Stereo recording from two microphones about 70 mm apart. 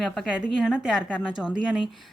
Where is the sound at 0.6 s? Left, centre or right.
Centre.